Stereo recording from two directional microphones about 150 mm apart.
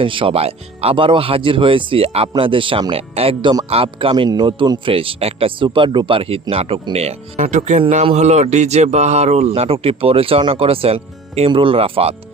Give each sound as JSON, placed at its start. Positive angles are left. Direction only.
{"t": 0.0, "sound": "a man's voice", "side_deg": -35}